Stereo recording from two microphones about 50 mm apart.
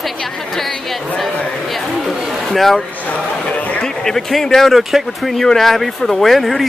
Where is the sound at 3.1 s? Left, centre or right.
Left.